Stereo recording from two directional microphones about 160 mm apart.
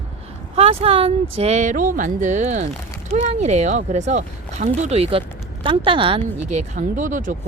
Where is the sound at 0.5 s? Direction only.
40° right (ahead or behind).